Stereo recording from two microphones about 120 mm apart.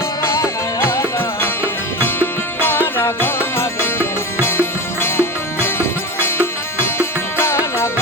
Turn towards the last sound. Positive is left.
turn(degrees=20)  # may be behind; listen again after turning